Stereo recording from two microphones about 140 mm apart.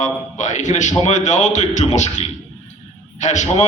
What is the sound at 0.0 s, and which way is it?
A man's voice, 60° left (ahead or behind).